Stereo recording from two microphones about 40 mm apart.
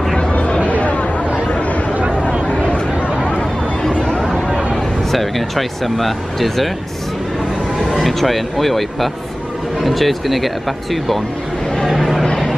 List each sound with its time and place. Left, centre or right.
0.7 s chatter: left
3.3 s a sound: centre
4.3 s chatter: centre
5.1 s speech: centre
7.8 s speech: centre
11.9 s a sound: centre